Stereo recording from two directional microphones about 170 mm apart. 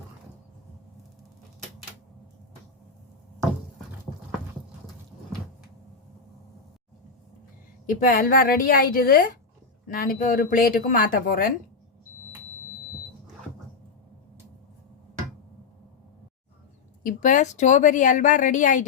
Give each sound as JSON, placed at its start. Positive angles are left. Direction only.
{"t": 7.9, "sound": "speech", "side_deg": 55}
{"t": 17.0, "sound": "a woman's voice", "side_deg": 50}